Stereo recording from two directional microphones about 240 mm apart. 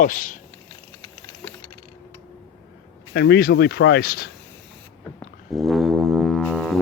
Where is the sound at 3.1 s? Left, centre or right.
Left.